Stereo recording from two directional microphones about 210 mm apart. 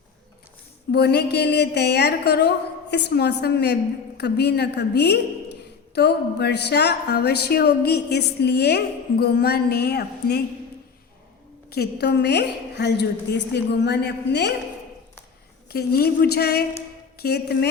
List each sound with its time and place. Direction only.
0.9 s a woman's voice: 50° left (ahead or behind)
11.7 s a woman's voice: 50° left (ahead or behind)
15.7 s a woman's voice: 50° left (ahead or behind)